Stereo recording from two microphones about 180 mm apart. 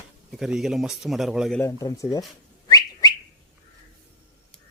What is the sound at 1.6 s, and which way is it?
Speech, 20° left (ahead or behind).